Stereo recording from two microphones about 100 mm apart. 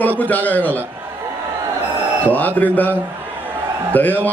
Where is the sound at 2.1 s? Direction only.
15° left (ahead or behind).